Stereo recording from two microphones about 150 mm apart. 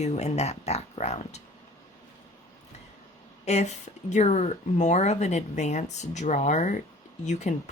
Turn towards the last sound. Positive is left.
turn(degrees=50)  # may be behind; listen again after turning